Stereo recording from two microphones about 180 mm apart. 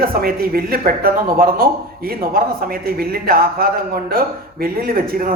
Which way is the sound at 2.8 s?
55° right (ahead or behind).